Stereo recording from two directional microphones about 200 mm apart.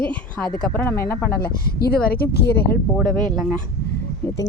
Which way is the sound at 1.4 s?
50° left (ahead or behind).